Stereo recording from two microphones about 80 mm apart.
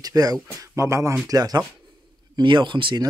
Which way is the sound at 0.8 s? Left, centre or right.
Right.